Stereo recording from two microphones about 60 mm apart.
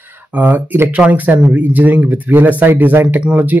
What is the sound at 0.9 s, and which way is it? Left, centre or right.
Speech, right.